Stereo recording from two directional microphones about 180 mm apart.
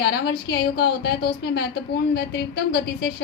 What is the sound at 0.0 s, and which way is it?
A woman's voice, 65° left (ahead or behind).